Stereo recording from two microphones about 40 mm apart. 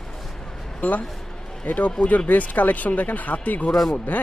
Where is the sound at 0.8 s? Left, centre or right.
Left.